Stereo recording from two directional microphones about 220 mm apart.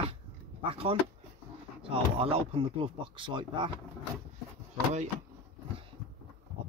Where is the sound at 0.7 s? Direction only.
25° right (ahead or behind).